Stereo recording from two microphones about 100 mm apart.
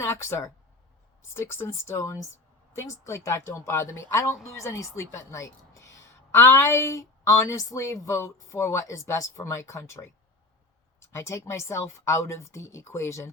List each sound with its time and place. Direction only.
0.0 s a woman's voice: 25° left (ahead or behind)
11.1 s speech: 25° left (ahead or behind)